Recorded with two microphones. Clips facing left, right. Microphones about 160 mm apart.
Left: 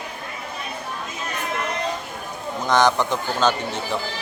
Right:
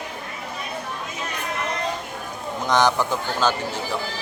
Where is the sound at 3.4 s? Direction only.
20° left (ahead or behind).